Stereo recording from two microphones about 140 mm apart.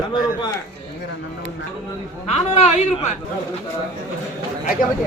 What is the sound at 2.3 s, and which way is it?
Speech, 50° left (ahead or behind).